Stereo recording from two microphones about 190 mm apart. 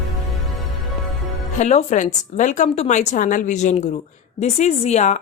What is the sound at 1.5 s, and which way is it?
A woman's voice, 35° left (ahead or behind).